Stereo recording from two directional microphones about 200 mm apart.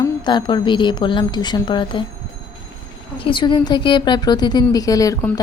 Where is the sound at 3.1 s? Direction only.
25° left (ahead or behind).